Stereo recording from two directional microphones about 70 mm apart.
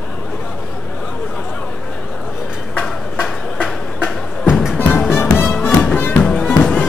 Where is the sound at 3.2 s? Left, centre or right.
Centre.